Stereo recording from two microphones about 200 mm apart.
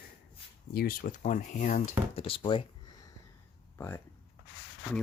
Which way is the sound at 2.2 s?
25° left (ahead or behind).